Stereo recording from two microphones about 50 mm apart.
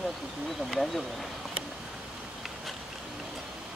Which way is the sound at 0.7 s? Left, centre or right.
Centre.